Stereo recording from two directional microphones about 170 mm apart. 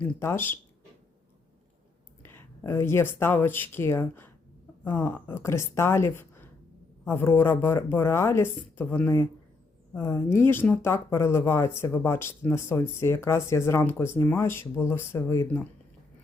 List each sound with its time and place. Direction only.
0.0 s speech: 15° left (ahead or behind)
2.2 s speech: 15° left (ahead or behind)